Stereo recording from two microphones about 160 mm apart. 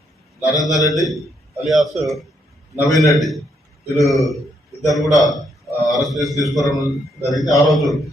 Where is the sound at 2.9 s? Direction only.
20° left (ahead or behind).